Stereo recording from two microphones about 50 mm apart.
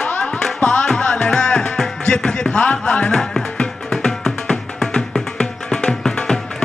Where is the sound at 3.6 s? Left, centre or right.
Centre.